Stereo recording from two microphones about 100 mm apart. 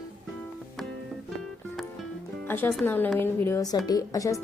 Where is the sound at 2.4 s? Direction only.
20° left (ahead or behind).